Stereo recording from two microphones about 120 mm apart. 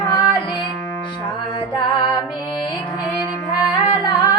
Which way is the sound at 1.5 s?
40° left (ahead or behind).